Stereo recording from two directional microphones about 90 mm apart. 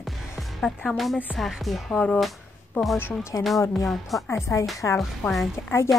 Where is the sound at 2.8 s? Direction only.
20° left (ahead or behind).